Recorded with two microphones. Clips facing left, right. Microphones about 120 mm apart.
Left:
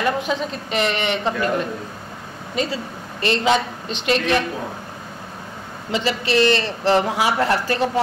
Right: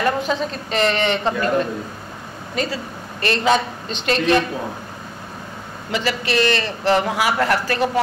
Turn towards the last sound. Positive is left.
turn(degrees=25)  # may be behind; listen again after turning